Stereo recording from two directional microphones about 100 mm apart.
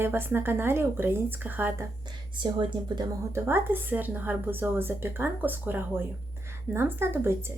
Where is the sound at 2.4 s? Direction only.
50° right (ahead or behind).